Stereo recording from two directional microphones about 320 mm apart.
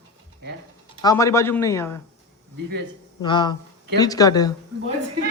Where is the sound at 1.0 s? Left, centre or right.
Centre.